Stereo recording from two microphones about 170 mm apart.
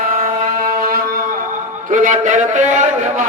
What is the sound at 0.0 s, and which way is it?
Music, 55° right (ahead or behind).